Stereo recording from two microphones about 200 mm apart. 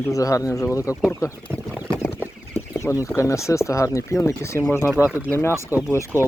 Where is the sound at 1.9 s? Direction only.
15° left (ahead or behind).